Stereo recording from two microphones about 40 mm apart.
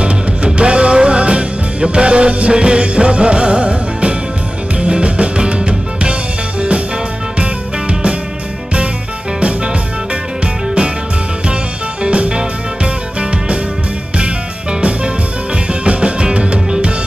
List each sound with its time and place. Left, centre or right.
0.0 s music: right
7.9 s music: right
10.4 s music: right
12.0 s music: right